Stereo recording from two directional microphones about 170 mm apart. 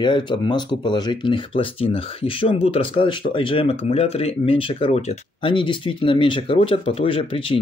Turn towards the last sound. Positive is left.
turn(degrees=30)  # may be behind; listen again after turning